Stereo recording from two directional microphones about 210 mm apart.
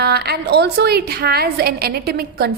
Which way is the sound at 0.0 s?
50° right (ahead or behind).